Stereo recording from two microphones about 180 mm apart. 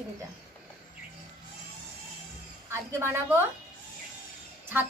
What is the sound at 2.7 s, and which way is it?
Speech, 15° right (ahead or behind).